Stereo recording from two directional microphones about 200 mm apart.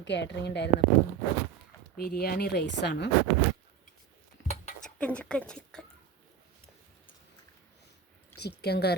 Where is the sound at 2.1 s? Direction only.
50° left (ahead or behind).